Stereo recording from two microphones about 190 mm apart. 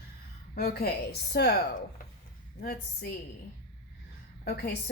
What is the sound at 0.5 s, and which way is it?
Speech, 55° left (ahead or behind).